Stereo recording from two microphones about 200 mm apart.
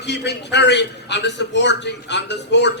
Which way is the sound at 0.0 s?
60° left (ahead or behind).